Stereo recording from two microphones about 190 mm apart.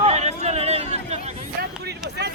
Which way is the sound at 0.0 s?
35° right (ahead or behind).